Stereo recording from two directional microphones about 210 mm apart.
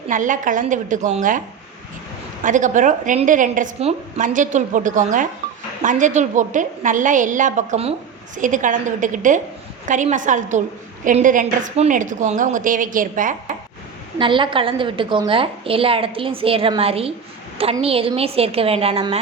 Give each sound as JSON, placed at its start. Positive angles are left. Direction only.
{"t": 0.1, "sound": "a woman's voice", "side_deg": -40}
{"t": 2.4, "sound": "a woman's voice", "side_deg": -35}
{"t": 14.2, "sound": "a woman's voice", "side_deg": -25}